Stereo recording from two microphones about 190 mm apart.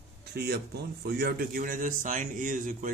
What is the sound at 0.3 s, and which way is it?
Speech, 60° right (ahead or behind).